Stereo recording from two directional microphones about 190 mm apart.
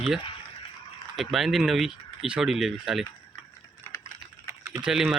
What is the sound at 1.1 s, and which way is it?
Speech, centre (ahead or behind).